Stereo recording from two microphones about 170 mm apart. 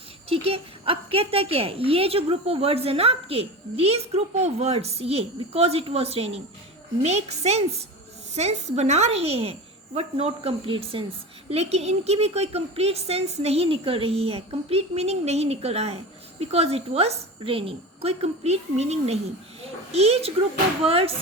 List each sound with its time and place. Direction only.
0.3 s a woman's voice: 35° right (ahead or behind)